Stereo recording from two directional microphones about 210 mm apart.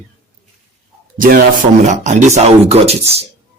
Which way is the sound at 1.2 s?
40° right (ahead or behind).